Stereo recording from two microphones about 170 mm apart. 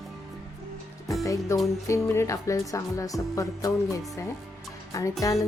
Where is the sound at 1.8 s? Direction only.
15° left (ahead or behind).